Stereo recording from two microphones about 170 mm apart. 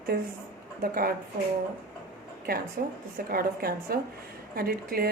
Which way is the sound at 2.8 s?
60° right (ahead or behind).